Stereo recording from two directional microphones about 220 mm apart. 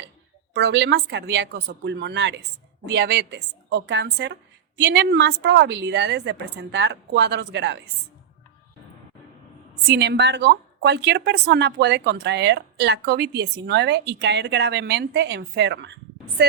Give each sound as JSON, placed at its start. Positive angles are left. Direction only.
{"t": 0.5, "sound": "a woman's voice", "side_deg": -50}
{"t": 9.9, "sound": "a woman's voice", "side_deg": -50}